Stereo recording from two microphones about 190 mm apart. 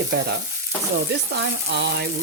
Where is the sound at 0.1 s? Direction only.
60° right (ahead or behind).